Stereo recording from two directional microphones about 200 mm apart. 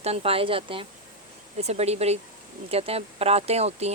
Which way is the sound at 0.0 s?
30° right (ahead or behind).